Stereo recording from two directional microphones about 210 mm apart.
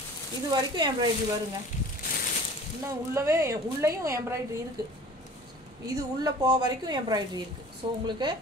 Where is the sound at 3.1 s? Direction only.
15° right (ahead or behind).